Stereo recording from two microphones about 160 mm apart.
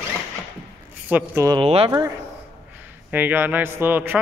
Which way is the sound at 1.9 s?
20° right (ahead or behind).